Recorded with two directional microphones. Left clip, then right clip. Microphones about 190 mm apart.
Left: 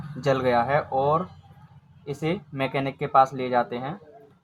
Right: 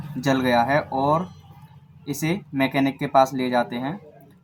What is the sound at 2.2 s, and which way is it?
Speech, 30° left (ahead or behind).